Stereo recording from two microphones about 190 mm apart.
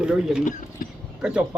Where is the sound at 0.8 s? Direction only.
45° left (ahead or behind).